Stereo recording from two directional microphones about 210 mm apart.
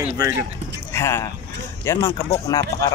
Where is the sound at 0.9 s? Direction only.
15° left (ahead or behind).